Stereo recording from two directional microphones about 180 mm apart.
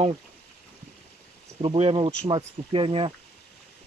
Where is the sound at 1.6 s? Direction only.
35° right (ahead or behind).